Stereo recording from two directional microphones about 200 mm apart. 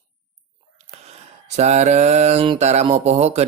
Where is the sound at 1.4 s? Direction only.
35° right (ahead or behind).